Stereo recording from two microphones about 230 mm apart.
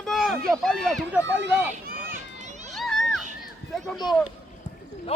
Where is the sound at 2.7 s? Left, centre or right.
Centre.